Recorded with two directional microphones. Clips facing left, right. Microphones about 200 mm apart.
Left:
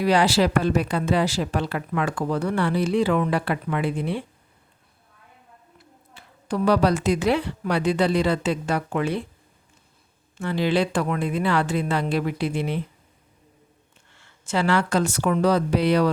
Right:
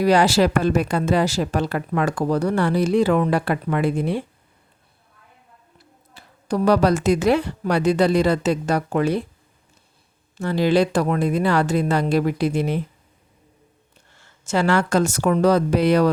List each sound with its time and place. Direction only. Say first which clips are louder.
0.0 s speech: right 3 dB; 45° right (ahead or behind)
6.1 s speech: right 3 dB; 40° right (ahead or behind)
10.3 s speech: right 4 dB; 40° right (ahead or behind)
14.1 s speech: right 3 dB; 40° right (ahead or behind)